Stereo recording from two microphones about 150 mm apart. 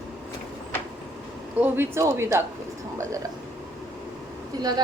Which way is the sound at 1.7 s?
15° right (ahead or behind).